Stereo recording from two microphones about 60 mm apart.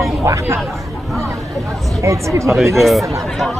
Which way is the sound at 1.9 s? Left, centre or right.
Right.